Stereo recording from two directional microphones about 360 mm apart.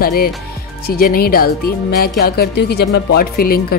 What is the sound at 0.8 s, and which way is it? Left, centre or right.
Music, left.